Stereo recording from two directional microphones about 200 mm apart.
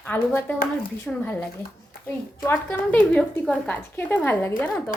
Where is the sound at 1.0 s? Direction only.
10° left (ahead or behind).